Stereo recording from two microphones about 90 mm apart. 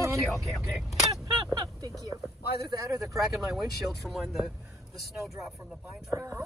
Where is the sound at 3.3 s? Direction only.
Centre (ahead or behind).